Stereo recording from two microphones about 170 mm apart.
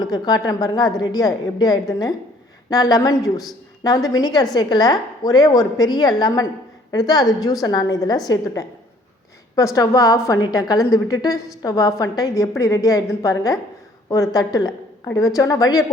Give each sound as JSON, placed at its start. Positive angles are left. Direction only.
{"t": 0.0, "sound": "a woman's voice", "side_deg": 25}
{"t": 9.7, "sound": "a woman's voice", "side_deg": 20}